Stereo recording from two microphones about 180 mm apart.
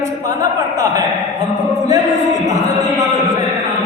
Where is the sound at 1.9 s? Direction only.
20° right (ahead or behind).